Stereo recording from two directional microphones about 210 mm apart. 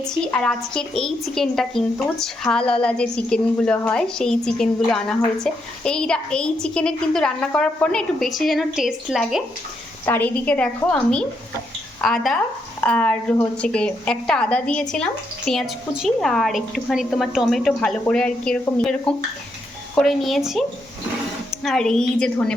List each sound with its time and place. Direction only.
0.0 s a woman's voice: 5° left (ahead or behind)
10.1 s a woman's voice: 10° left (ahead or behind)